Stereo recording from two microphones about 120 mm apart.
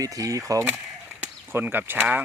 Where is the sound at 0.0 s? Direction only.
30° right (ahead or behind).